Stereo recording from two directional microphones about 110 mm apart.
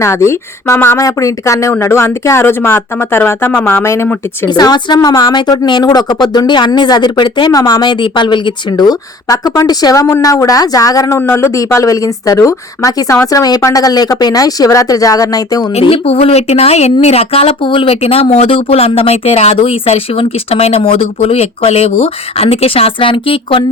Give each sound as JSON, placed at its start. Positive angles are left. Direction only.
{"t": 0.0, "sound": "speech", "side_deg": 25}
{"t": 4.4, "sound": "a woman's voice", "side_deg": 40}
{"t": 11.2, "sound": "a woman's voice", "side_deg": 25}
{"t": 15.8, "sound": "speech", "side_deg": 60}